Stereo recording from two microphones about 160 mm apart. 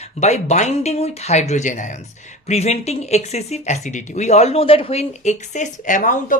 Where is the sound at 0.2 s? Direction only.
45° left (ahead or behind).